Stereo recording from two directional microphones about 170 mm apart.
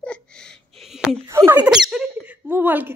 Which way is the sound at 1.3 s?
15° right (ahead or behind).